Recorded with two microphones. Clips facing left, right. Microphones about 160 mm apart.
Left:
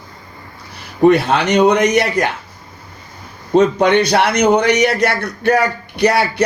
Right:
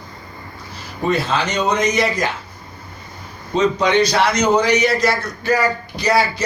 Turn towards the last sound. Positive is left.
turn(degrees=65)  # may be behind; listen again after turning